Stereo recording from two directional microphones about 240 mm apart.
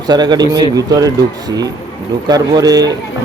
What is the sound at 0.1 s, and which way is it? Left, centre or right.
Speech, centre.